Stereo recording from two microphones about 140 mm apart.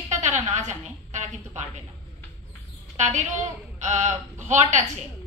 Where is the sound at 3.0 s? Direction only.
55° right (ahead or behind).